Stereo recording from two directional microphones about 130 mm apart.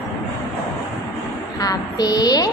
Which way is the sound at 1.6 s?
30° left (ahead or behind).